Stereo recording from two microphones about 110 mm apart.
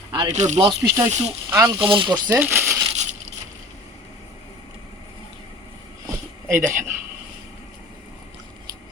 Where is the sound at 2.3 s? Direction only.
20° right (ahead or behind).